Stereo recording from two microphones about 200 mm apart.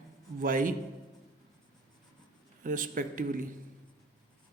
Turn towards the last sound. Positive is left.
turn(degrees=-45)  # may be behind; listen again after turning